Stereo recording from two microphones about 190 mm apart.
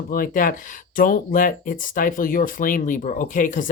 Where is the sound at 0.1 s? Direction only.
45° left (ahead or behind).